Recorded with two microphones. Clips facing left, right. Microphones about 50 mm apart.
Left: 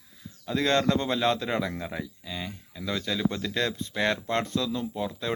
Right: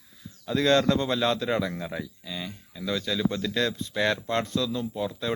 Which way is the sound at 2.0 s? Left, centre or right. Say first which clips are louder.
Even; left.